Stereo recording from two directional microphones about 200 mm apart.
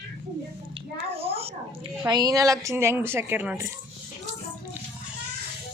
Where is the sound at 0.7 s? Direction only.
30° right (ahead or behind).